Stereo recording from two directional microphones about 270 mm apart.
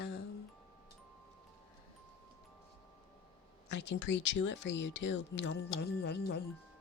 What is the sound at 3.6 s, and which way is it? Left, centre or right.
Speech, left.